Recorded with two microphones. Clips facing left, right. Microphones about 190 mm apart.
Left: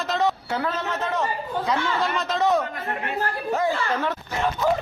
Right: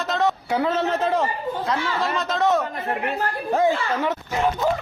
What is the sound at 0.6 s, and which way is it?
Speech, 25° right (ahead or behind).